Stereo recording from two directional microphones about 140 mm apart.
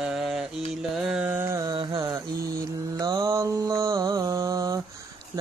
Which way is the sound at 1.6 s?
30° right (ahead or behind).